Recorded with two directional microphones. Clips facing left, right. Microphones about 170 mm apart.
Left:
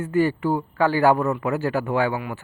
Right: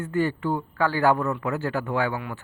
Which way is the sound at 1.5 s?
10° left (ahead or behind).